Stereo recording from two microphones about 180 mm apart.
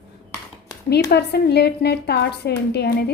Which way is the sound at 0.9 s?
65° left (ahead or behind).